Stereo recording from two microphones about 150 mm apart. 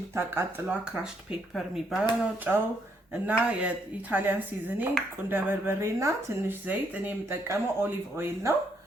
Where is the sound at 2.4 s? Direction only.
15° right (ahead or behind).